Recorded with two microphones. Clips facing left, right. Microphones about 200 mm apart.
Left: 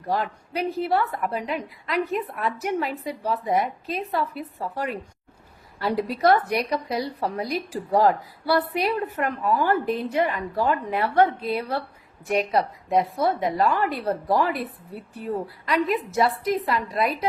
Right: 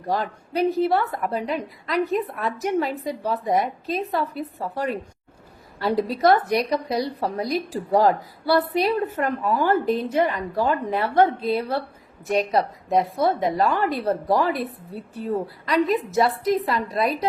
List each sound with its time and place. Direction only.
0.1 s speech: 35° right (ahead or behind)
12.9 s speech: 30° right (ahead or behind)
15.6 s speech: 35° right (ahead or behind)